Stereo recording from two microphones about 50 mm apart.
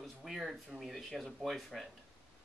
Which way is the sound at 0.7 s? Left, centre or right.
Centre.